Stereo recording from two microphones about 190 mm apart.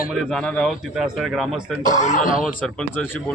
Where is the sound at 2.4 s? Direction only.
Centre (ahead or behind).